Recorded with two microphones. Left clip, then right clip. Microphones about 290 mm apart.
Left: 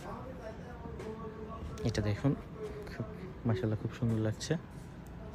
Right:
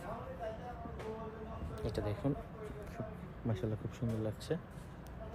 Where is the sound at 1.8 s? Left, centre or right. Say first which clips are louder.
Left 4 dB; left.